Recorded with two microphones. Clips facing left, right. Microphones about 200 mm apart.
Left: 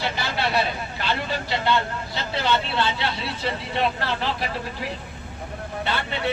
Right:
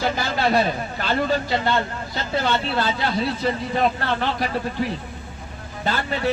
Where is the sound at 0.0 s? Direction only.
45° right (ahead or behind).